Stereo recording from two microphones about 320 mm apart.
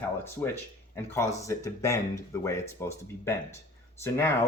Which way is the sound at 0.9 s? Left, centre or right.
Centre.